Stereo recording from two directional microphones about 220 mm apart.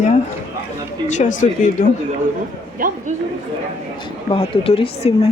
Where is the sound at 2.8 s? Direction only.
40° right (ahead or behind).